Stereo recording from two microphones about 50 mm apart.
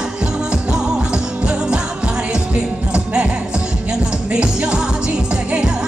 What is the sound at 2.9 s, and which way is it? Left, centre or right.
Music, right.